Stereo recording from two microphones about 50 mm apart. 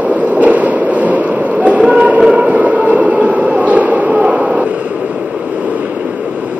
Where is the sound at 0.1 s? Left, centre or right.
Right.